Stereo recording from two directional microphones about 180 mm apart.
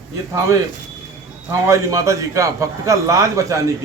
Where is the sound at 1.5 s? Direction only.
15° right (ahead or behind).